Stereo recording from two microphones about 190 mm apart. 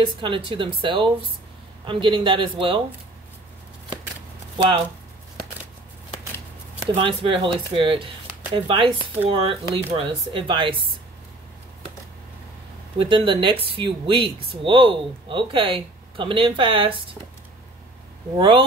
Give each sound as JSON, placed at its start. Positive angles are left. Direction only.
{"t": 0.0, "sound": "speech", "side_deg": -25}
{"t": 4.6, "sound": "speech", "side_deg": -25}
{"t": 7.0, "sound": "speech", "side_deg": -25}
{"t": 12.9, "sound": "speech", "side_deg": -25}